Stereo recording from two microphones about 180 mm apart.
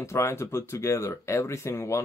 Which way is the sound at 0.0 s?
15° left (ahead or behind).